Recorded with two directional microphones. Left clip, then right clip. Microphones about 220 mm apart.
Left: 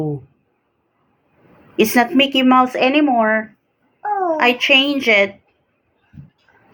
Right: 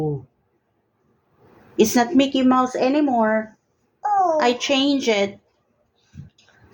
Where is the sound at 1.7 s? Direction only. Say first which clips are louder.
Left 3 dB; centre (ahead or behind).